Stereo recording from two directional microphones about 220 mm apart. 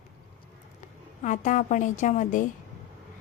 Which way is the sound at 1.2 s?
35° left (ahead or behind).